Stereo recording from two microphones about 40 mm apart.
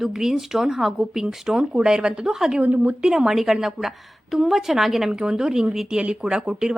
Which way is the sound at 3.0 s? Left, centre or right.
Centre.